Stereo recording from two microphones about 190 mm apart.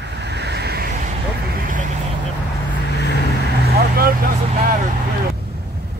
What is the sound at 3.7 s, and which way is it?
Vehicle, 50° right (ahead or behind).